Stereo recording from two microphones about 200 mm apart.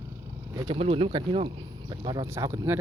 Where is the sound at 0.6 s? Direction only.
30° right (ahead or behind).